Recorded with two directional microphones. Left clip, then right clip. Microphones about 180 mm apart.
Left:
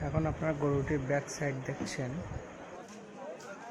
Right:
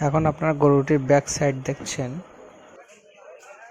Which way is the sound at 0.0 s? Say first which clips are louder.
Right 12 dB; 40° right (ahead or behind).